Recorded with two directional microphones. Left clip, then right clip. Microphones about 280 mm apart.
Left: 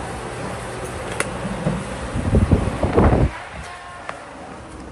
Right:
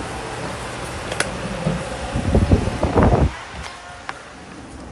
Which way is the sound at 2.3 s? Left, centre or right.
Centre.